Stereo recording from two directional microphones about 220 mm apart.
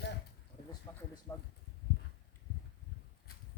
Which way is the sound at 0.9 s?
15° left (ahead or behind).